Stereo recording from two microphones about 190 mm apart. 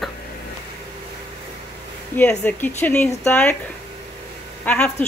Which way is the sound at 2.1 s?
10° left (ahead or behind).